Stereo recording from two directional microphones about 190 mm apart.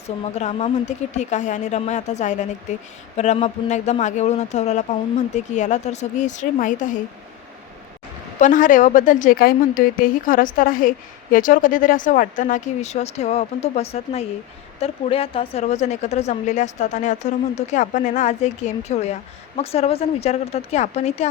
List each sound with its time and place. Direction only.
0.3 s a woman's voice: 40° left (ahead or behind)
8.4 s a woman's voice: 45° left (ahead or behind)